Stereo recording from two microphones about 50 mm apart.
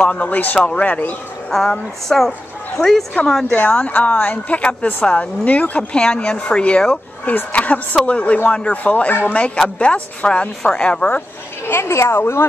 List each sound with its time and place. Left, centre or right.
0.0 s speech: left
1.5 s speech: centre
3.5 s speech: left
11.6 s speech: left